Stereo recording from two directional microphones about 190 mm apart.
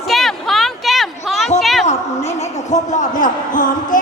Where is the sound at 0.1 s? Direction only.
Centre (ahead or behind).